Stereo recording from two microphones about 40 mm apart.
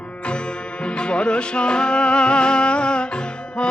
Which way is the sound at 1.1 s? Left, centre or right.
Left.